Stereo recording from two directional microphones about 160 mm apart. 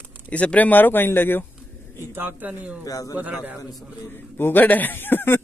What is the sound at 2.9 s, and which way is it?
Speech, 20° left (ahead or behind).